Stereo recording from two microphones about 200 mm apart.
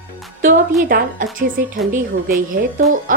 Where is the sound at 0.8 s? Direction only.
45° right (ahead or behind).